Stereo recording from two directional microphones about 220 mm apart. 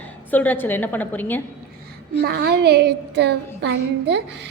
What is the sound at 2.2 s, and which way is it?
A woman's voice, 50° right (ahead or behind).